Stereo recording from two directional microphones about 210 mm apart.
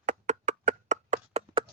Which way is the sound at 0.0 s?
35° right (ahead or behind).